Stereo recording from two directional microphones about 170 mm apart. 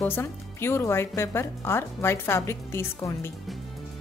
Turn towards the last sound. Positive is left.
turn(degrees=15)  # may be behind; listen again after turning